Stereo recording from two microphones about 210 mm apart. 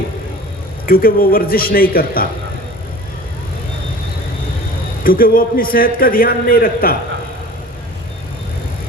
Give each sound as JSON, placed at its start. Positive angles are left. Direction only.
{"t": 0.9, "sound": "a man's voice", "side_deg": 45}
{"t": 5.0, "sound": "a man's voice", "side_deg": 45}